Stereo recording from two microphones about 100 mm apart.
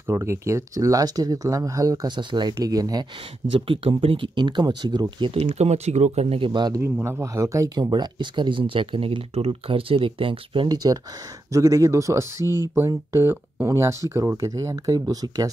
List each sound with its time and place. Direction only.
0.0 s speech: 30° right (ahead or behind)
2.1 s speech: 50° right (ahead or behind)
2.5 s speech: 40° right (ahead or behind)
3.5 s speech: 60° right (ahead or behind)
5.2 s speech: 80° right
6.5 s speech: 45° right (ahead or behind)
6.8 s speech: 25° right (ahead or behind)
7.8 s speech: 50° right (ahead or behind)
10.7 s speech: 40° right (ahead or behind)